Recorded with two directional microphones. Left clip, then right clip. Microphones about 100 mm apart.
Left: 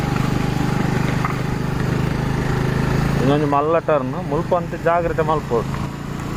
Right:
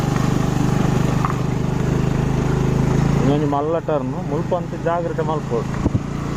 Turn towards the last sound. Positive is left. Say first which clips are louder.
# left 3 dB
turn(degrees=25)  # may be behind; listen again after turning